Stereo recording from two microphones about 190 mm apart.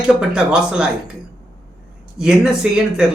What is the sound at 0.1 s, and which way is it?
Speech, 5° right (ahead or behind).